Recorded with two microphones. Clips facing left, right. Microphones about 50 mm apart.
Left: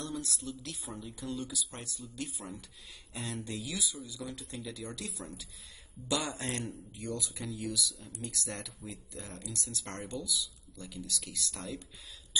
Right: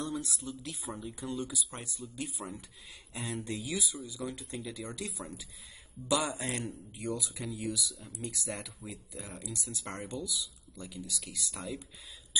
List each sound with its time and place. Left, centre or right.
0.0 s a sound: centre
0.4 s speech: centre
2.2 s speech: right
6.0 s speech: centre
6.3 s speech: centre
7.2 s speech: centre
10.8 s speech: centre